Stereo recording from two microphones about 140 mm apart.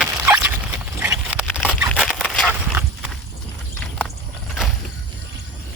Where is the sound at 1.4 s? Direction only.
10° left (ahead or behind).